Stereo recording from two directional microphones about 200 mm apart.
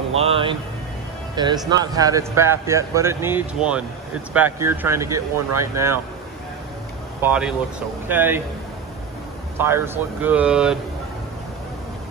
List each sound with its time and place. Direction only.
0.2 s speech: 25° right (ahead or behind)
7.2 s speech: 5° right (ahead or behind)
10.2 s speech: 5° right (ahead or behind)